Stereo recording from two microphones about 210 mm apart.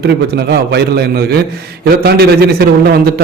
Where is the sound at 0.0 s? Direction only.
50° right (ahead or behind).